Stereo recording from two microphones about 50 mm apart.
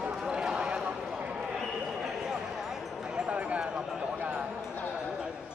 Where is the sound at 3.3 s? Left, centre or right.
Right.